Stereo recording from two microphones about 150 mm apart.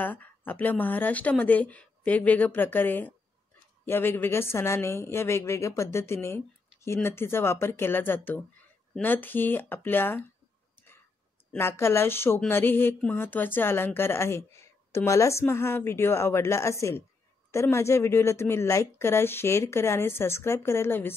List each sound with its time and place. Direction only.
0.0 s a woman's voice: 10° left (ahead or behind)
11.5 s a woman's voice: 15° left (ahead or behind)